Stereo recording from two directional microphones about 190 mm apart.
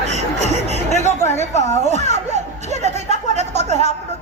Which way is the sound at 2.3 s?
35° right (ahead or behind).